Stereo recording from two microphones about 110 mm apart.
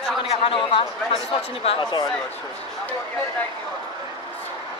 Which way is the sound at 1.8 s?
40° left (ahead or behind).